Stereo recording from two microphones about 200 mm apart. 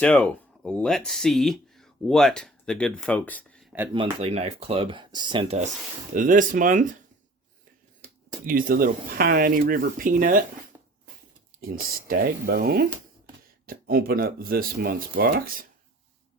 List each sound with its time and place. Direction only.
0.0 s speech: 5° left (ahead or behind)
3.9 s speech: 25° right (ahead or behind)
8.4 s speech: 45° right (ahead or behind)
10.7 s a sound: 15° right (ahead or behind)
11.6 s speech: 45° right (ahead or behind)